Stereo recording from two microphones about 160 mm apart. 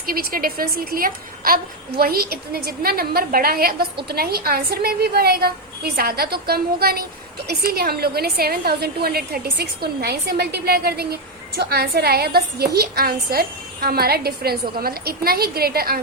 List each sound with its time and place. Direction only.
0.0 s a woman's voice: 65° right (ahead or behind)